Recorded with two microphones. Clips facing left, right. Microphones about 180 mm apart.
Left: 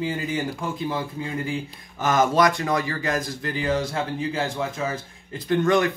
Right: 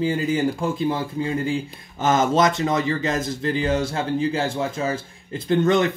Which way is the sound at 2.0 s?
25° right (ahead or behind).